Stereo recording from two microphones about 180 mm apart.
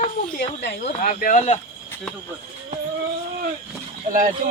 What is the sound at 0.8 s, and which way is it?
Speech, 45° left (ahead or behind).